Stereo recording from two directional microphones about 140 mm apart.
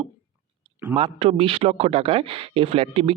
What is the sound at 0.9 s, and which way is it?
Speech, 40° right (ahead or behind).